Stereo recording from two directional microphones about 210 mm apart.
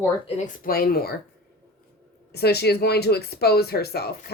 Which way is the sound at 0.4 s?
45° left (ahead or behind).